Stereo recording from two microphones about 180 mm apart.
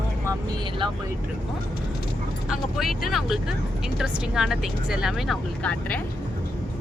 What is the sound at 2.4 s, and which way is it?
Speech, centre (ahead or behind).